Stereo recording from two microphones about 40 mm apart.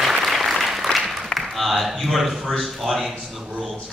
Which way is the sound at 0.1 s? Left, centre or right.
Centre.